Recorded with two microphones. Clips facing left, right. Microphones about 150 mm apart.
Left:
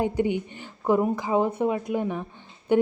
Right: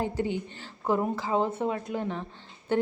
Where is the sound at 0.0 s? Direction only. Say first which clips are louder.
Left 5 dB; 15° left (ahead or behind).